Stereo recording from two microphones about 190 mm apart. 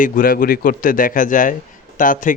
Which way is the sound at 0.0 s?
50° left (ahead or behind).